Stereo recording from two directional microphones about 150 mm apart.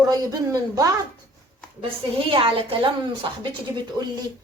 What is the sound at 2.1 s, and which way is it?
A woman's voice, 35° right (ahead or behind).